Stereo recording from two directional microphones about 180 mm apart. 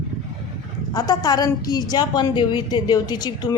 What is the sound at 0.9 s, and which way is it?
A woman's voice, 20° left (ahead or behind).